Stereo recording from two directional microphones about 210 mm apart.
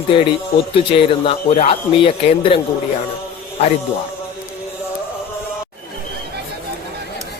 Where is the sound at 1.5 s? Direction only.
35° left (ahead or behind).